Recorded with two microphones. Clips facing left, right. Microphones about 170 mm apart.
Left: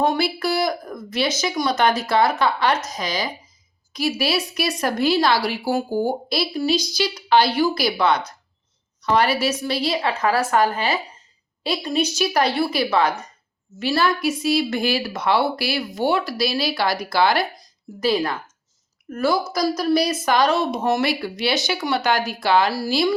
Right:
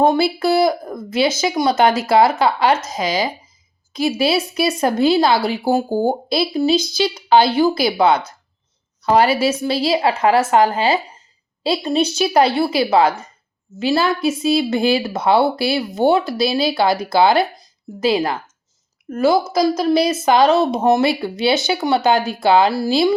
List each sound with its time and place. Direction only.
0.2 s speech: 25° right (ahead or behind)